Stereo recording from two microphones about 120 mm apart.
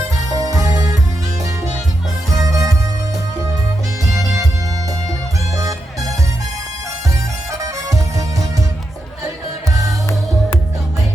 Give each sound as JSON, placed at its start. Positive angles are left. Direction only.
{"t": 0.3, "sound": "music", "side_deg": -30}
{"t": 2.3, "sound": "music", "side_deg": -30}
{"t": 5.5, "sound": "music", "side_deg": -30}
{"t": 7.6, "sound": "music", "side_deg": -25}